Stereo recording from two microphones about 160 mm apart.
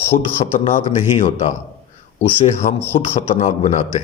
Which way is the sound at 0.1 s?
40° left (ahead or behind).